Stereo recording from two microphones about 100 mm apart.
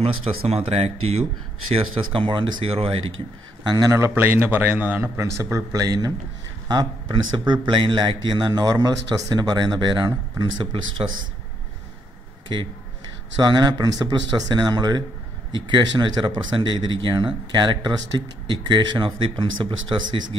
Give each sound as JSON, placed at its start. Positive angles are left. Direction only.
{"t": 0.0, "sound": "speech", "side_deg": -75}
{"t": 1.7, "sound": "speech", "side_deg": -65}
{"t": 2.7, "sound": "speech", "side_deg": -70}
{"t": 3.6, "sound": "speech", "side_deg": -40}
{"t": 4.1, "sound": "a man's voice", "side_deg": -20}
{"t": 13.4, "sound": "speech", "side_deg": -45}